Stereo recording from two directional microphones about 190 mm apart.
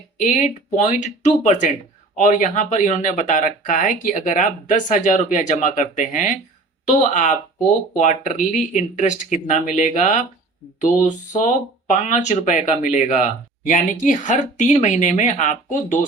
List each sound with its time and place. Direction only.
0.2 s speech: 40° left (ahead or behind)